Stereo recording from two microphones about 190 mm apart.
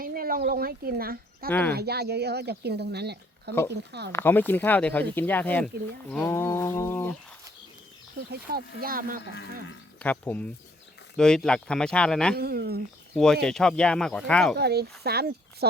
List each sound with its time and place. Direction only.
0.0 s speech: 50° right (ahead or behind)
1.5 s speech: 10° left (ahead or behind)
1.7 s speech: 55° right (ahead or behind)
4.1 s speech: 10° left (ahead or behind)
8.3 s speech: 55° right (ahead or behind)
9.2 s cattle: 65° left (ahead or behind)
10.0 s speech: 10° left (ahead or behind)
12.4 s speech: 55° right (ahead or behind)
13.1 s speech: centre (ahead or behind)
14.6 s speech: 60° right (ahead or behind)